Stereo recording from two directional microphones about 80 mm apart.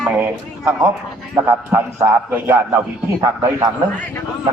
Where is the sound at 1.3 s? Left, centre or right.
Right.